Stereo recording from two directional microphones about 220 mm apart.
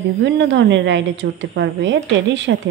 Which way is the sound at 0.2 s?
55° right (ahead or behind).